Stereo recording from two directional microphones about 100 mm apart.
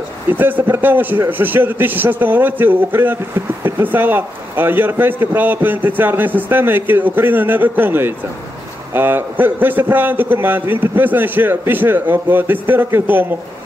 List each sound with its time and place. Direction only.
0.3 s a man's voice: 20° right (ahead or behind)